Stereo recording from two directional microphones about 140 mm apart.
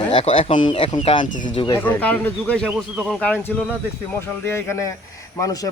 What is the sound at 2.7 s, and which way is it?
Speech, centre (ahead or behind).